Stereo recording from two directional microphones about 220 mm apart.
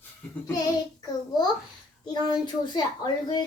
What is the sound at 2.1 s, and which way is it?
A child's voice, 20° left (ahead or behind).